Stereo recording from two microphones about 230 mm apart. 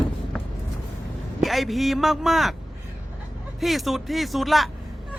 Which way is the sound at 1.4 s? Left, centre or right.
Centre.